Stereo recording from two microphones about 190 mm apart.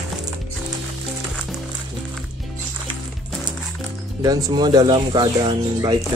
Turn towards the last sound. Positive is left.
turn(degrees=-25)  # may be behind; listen again after turning